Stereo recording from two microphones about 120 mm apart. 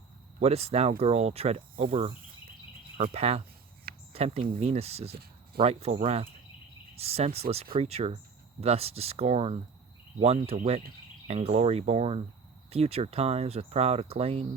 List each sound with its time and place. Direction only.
0.3 s speech: 60° right (ahead or behind)